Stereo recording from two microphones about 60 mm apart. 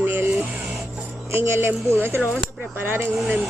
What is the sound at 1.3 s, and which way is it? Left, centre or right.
Speech, right.